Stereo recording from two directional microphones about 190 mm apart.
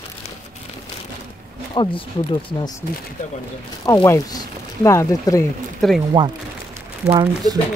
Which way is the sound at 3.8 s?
15° left (ahead or behind).